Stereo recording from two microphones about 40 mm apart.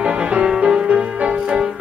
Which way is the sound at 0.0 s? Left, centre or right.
Right.